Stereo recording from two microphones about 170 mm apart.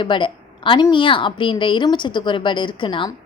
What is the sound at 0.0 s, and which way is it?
A woman's voice, 30° left (ahead or behind).